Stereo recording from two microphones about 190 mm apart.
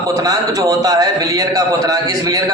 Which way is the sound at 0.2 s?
20° right (ahead or behind).